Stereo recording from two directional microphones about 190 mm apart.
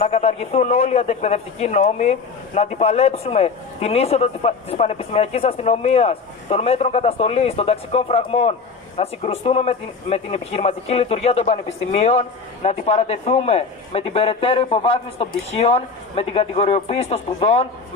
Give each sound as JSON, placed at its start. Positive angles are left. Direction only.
{"t": 0.0, "sound": "a man's voice", "side_deg": 35}